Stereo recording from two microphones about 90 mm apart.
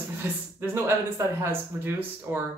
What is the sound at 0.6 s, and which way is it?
A man's voice, 25° right (ahead or behind).